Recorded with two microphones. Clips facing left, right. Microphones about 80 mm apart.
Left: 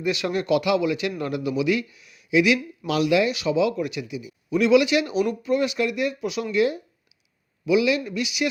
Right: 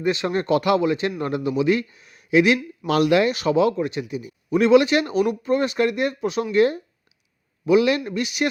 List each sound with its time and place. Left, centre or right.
0.0 s a man's voice: right
3.8 s a man's voice: right